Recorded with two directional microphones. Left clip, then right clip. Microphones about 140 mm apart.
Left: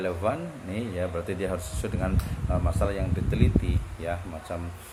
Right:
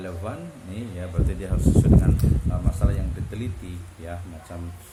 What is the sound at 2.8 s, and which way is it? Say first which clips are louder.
Speech: left 4 dB; 5° left (ahead or behind).